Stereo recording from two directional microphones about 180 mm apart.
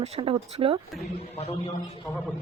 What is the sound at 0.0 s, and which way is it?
Speech, 35° right (ahead or behind).